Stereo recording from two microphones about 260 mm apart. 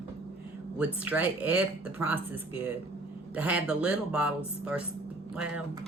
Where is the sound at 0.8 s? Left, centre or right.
Centre.